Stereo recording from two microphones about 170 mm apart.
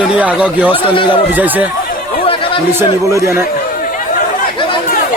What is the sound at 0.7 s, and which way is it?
Speech, 30° left (ahead or behind).